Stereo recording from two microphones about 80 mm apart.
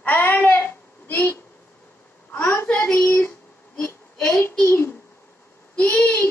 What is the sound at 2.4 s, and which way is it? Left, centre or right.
Speech, left.